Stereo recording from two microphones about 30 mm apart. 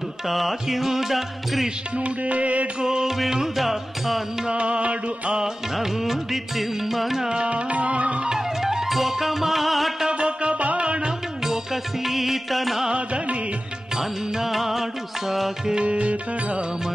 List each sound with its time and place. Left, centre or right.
0.3 s music: centre
2.0 s music: right
2.8 s music: right
3.5 s music: centre
4.5 s music: right
5.8 s music: centre
7.4 s music: right
8.3 s music: centre
10.0 s music: right
10.8 s music: right
11.4 s music: centre
12.9 s music: right
13.9 s music: centre
15.8 s music: right